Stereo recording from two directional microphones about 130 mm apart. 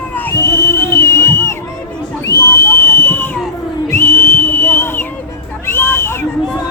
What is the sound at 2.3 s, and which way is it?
Whistle, 25° left (ahead or behind).